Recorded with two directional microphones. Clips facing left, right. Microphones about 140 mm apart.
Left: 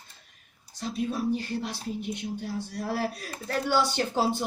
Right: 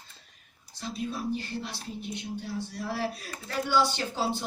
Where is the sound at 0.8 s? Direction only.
40° left (ahead or behind).